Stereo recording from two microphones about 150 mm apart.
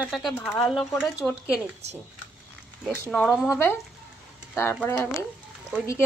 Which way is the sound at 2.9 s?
15° left (ahead or behind).